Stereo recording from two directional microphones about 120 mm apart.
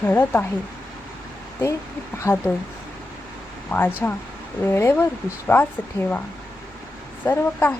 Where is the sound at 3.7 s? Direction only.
15° left (ahead or behind).